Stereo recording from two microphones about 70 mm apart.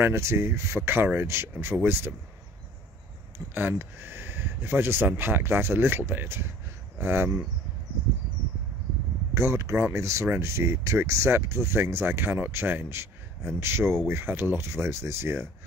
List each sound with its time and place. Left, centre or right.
0.0 s speech: right
3.3 s speech: right
9.3 s speech: right